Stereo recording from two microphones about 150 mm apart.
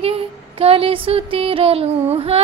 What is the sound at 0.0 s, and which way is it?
Music, 40° right (ahead or behind).